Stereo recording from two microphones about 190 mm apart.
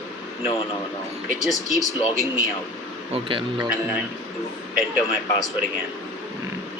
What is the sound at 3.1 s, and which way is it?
Speech, 30° right (ahead or behind).